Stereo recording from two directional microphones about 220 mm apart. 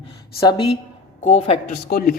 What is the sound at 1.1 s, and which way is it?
Speech, 30° left (ahead or behind).